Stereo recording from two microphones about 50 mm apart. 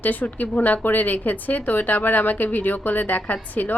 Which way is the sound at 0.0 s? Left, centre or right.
Left.